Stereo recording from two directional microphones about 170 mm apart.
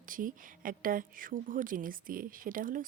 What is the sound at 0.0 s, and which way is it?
Speech, 55° right (ahead or behind).